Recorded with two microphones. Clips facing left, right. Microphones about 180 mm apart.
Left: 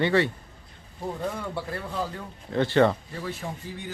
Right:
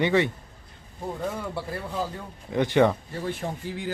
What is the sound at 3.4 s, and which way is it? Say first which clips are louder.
Speech: right 3 dB; 40° right (ahead or behind).